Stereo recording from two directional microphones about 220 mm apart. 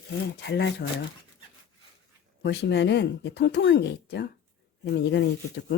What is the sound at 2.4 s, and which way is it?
Speech, 50° left (ahead or behind).